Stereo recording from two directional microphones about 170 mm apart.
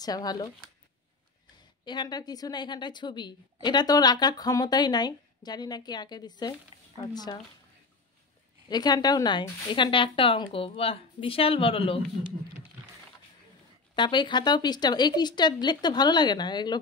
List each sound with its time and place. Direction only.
0.0 s a woman's voice: 20° left (ahead or behind)
1.9 s a woman's voice: 25° left (ahead or behind)
8.6 s a woman's voice: 25° left (ahead or behind)
13.9 s a woman's voice: 25° left (ahead or behind)